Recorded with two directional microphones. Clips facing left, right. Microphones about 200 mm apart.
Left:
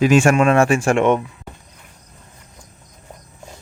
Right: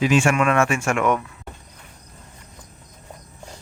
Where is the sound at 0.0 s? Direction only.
45° left (ahead or behind).